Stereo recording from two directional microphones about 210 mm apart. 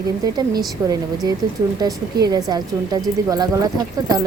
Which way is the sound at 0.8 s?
15° right (ahead or behind).